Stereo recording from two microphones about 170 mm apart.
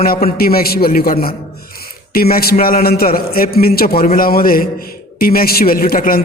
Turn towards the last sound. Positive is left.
turn(degrees=60)  # may be behind; listen again after turning